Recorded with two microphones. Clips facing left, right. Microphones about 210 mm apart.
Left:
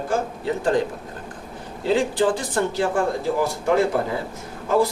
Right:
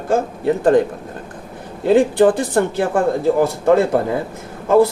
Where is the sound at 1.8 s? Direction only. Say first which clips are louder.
Right 7 dB; 60° right (ahead or behind).